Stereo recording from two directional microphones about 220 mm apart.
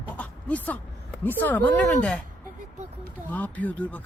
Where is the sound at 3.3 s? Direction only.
5° left (ahead or behind).